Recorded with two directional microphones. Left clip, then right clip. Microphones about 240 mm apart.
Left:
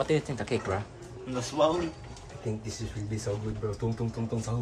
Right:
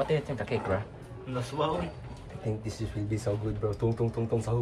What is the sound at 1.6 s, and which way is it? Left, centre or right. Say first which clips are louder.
Speech: left 5 dB; left.